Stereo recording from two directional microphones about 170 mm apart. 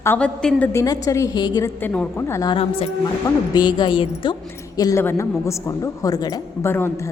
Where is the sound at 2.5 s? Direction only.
35° left (ahead or behind); by 7.1 s 15° left (ahead or behind).